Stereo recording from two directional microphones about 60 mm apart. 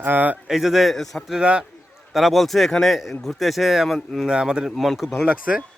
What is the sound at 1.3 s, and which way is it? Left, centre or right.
Speech, centre.